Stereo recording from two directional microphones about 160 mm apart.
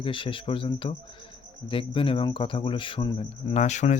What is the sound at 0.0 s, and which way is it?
Speech, 35° left (ahead or behind).